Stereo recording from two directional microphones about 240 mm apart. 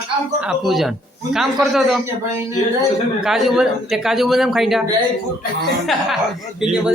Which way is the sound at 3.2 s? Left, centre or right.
Centre.